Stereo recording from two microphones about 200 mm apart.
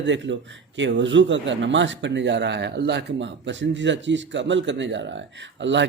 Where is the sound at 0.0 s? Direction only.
65° right (ahead or behind).